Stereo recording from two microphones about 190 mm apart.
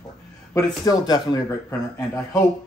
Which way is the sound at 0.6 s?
20° left (ahead or behind).